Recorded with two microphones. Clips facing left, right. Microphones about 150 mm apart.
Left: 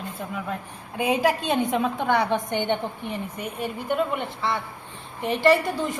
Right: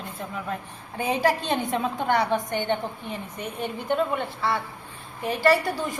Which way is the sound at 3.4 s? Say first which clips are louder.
Left 1 dB; 5° left (ahead or behind).